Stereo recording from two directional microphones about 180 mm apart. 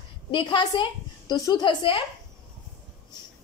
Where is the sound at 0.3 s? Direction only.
25° left (ahead or behind).